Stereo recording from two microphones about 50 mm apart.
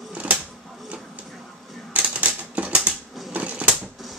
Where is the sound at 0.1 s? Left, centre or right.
Right.